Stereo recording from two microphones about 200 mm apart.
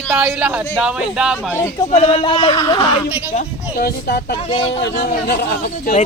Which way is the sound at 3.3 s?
50° left (ahead or behind).